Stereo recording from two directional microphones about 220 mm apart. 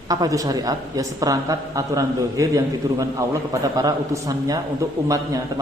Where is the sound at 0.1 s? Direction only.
15° right (ahead or behind).